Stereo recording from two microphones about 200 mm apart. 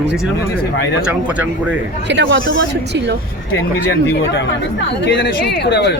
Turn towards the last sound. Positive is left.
turn(degrees=60)  # may be behind; listen again after turning